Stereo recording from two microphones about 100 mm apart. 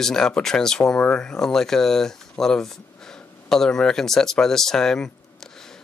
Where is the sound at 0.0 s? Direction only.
5° left (ahead or behind).